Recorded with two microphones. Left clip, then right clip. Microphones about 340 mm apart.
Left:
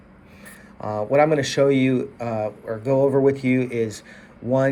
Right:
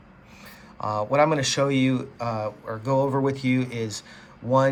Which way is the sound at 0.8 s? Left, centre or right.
Centre.